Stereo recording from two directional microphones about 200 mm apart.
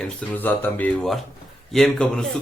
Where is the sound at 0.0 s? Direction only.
5° left (ahead or behind).